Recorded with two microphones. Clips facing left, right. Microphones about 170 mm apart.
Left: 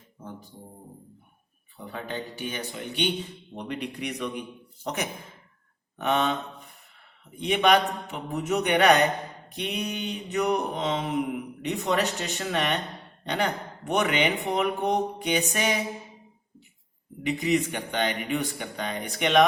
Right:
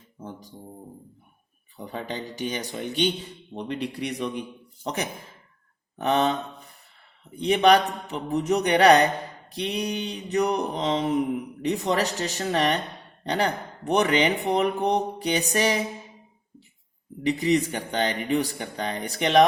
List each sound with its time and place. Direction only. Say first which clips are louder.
1.7 s a man's voice: right 2 dB; 40° right (ahead or behind)
6.0 s a man's voice: right 3 dB; 35° right (ahead or behind)
7.3 s a man's voice: right 3 dB; 35° right (ahead or behind)
17.2 s a man's voice: right 3 dB; 35° right (ahead or behind)